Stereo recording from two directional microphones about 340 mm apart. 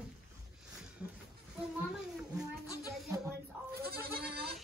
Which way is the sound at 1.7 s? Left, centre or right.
Centre.